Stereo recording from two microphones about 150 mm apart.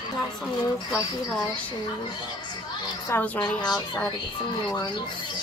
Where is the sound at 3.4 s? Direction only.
25° left (ahead or behind).